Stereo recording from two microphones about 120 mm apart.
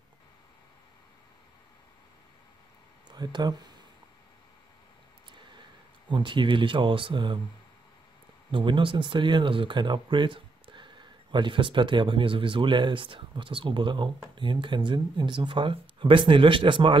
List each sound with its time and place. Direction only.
3.1 s speech: 35° right (ahead or behind)
5.3 s a sound: 40° right (ahead or behind)
8.5 s speech: 40° right (ahead or behind)